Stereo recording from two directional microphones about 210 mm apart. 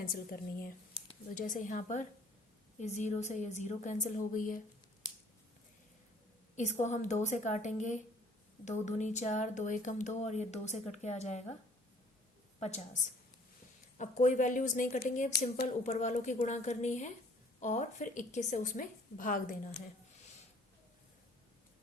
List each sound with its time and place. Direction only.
0.0 s a woman's voice: 45° left (ahead or behind)
0.9 s speech: 35° left (ahead or behind)
6.6 s speech: 35° left (ahead or behind)
12.5 s a woman's voice: 30° left (ahead or behind)
14.0 s speech: 35° left (ahead or behind)